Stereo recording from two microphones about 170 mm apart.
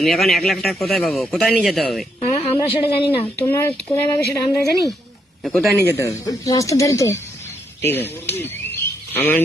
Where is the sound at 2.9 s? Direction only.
30° left (ahead or behind).